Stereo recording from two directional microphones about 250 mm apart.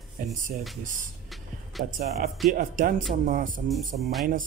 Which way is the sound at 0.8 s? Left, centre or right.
Right.